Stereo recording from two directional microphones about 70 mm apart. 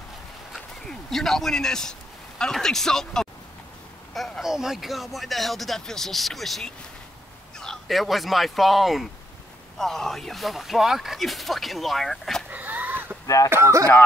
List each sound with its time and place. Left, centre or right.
0.8 s a man's voice: centre
12.4 s a sound: right
13.5 s speech: right